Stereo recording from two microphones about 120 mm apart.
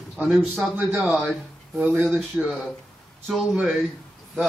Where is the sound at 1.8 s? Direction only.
10° right (ahead or behind).